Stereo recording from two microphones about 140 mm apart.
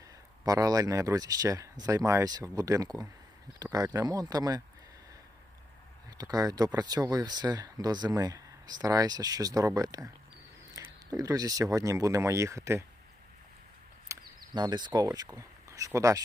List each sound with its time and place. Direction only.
0.4 s speech: 25° right (ahead or behind)
6.1 s speech: 25° right (ahead or behind)
14.1 s a sound: 20° right (ahead or behind)
14.5 s speech: 30° right (ahead or behind)